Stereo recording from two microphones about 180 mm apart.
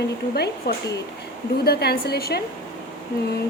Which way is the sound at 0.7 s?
60° left (ahead or behind).